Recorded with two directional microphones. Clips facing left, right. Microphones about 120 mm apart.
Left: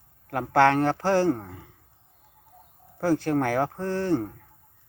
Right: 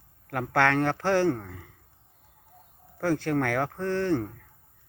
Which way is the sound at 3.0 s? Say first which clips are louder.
Left 3 dB; 15° left (ahead or behind).